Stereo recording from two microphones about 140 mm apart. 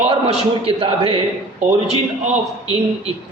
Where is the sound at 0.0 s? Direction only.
45° right (ahead or behind).